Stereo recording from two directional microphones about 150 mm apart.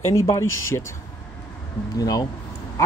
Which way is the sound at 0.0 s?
20° left (ahead or behind).